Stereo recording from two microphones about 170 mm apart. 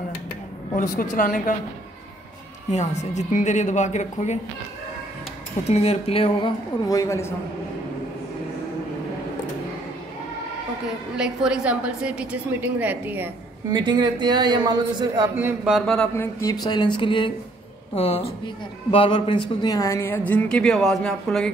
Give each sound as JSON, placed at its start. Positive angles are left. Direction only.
{"t": 1.1, "sound": "speech", "side_deg": 50}
{"t": 2.7, "sound": "speech", "side_deg": 40}
{"t": 5.6, "sound": "speech", "side_deg": 40}
{"t": 6.9, "sound": "speech", "side_deg": 20}
{"t": 11.1, "sound": "a woman's voice", "side_deg": -5}
{"t": 13.7, "sound": "a man's voice", "side_deg": -25}
{"t": 15.3, "sound": "a woman's voice", "side_deg": -10}
{"t": 15.7, "sound": "speech", "side_deg": 5}
{"t": 16.2, "sound": "speech", "side_deg": 20}